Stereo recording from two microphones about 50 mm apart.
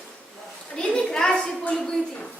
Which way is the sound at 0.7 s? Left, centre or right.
Centre.